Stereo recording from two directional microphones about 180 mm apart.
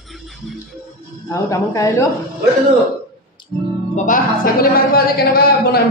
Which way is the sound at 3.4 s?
25° left (ahead or behind).